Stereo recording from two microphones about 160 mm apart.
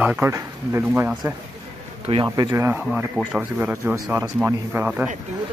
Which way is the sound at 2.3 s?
20° right (ahead or behind).